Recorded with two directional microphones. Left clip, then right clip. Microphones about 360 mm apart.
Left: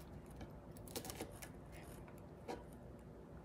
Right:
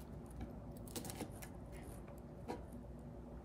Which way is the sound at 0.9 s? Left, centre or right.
Centre.